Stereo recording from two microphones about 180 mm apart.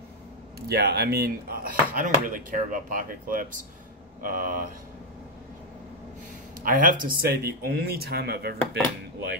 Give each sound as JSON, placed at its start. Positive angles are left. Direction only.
{"t": 0.6, "sound": "speech", "side_deg": -65}
{"t": 6.6, "sound": "speech", "side_deg": -50}